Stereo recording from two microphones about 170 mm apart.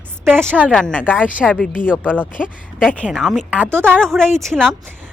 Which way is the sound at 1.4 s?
Centre (ahead or behind).